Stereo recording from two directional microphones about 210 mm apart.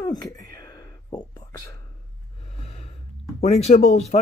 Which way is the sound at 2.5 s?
30° left (ahead or behind).